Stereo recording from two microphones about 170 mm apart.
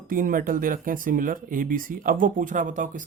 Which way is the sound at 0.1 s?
55° right (ahead or behind).